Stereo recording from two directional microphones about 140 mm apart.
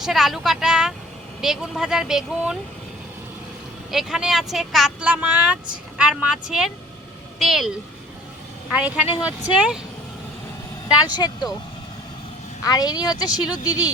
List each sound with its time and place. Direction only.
0.0 s speech: centre (ahead or behind)
3.9 s speech: 5° right (ahead or behind)
8.7 s speech: 10° right (ahead or behind)
11.0 s speech: 30° left (ahead or behind)
12.6 s speech: 30° left (ahead or behind)